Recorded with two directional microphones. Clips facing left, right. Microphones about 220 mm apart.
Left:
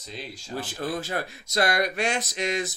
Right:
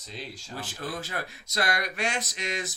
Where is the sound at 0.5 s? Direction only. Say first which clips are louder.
Left 6 dB; 35° left (ahead or behind).